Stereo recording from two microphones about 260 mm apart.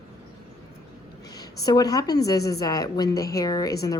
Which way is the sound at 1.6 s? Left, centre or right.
Centre.